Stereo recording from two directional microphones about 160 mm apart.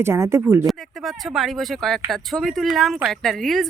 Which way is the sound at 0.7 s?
Centre (ahead or behind).